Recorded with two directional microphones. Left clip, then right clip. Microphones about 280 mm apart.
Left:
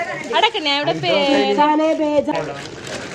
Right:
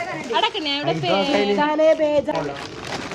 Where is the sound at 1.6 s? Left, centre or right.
Left.